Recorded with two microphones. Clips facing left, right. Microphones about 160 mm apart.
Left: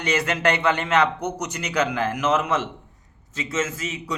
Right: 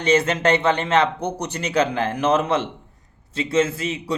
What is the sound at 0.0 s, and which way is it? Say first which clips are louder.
A man's voice: right 4 dB; 25° right (ahead or behind).